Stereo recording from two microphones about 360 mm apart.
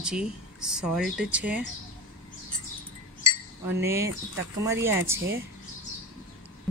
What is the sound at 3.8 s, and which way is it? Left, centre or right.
Speech, centre.